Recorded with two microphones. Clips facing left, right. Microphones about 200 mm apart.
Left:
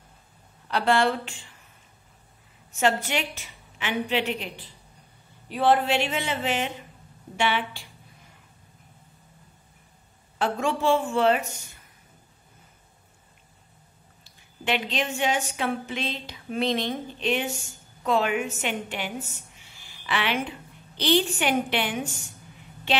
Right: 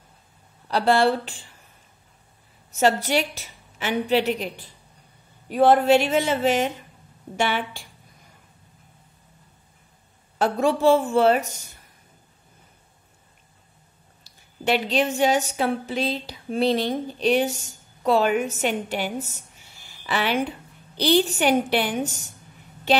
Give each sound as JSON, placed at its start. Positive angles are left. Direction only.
{"t": 0.7, "sound": "a woman's voice", "side_deg": -35}
{"t": 2.7, "sound": "a woman's voice", "side_deg": -40}
{"t": 10.4, "sound": "a woman's voice", "side_deg": -40}
{"t": 14.6, "sound": "a woman's voice", "side_deg": -40}